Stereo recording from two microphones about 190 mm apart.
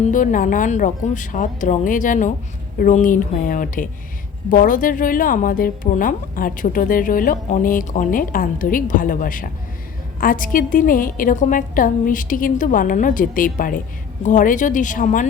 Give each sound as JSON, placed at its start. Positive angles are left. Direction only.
{"t": 0.0, "sound": "a woman's voice", "side_deg": 45}